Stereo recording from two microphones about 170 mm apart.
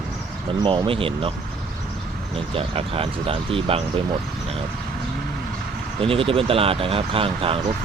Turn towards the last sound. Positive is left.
turn(degrees=-30)  # may be behind; listen again after turning